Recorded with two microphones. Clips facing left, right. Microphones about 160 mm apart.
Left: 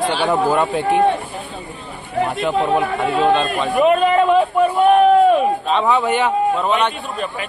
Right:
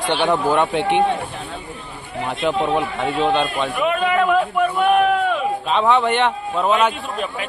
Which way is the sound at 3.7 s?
35° left (ahead or behind).